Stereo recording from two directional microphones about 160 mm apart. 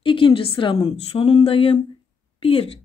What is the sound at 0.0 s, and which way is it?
Speech, 35° left (ahead or behind).